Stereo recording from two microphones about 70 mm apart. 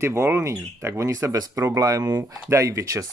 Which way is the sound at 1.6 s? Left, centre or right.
Right.